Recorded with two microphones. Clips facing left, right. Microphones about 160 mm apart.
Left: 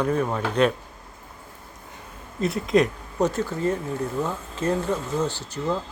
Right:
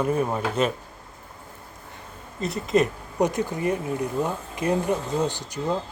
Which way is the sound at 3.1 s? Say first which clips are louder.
Even; 15° right (ahead or behind).